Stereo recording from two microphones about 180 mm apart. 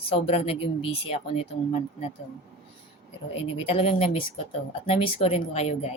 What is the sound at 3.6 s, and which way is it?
Speech, 30° left (ahead or behind).